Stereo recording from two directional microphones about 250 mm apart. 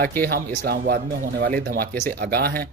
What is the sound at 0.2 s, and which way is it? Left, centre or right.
Speech, right.